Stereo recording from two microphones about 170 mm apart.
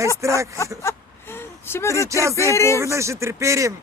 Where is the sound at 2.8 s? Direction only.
15° right (ahead or behind).